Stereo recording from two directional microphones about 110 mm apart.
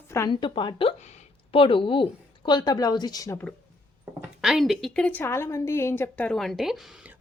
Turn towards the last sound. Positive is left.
turn(degrees=0)  # may be behind; listen again after turning